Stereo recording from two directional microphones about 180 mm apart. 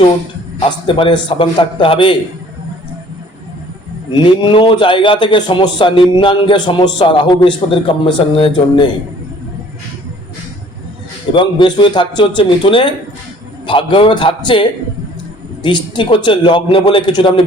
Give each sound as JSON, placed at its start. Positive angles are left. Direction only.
{"t": 0.6, "sound": "a man's voice", "side_deg": 30}
{"t": 4.1, "sound": "a man's voice", "side_deg": 25}
{"t": 11.3, "sound": "a man's voice", "side_deg": 25}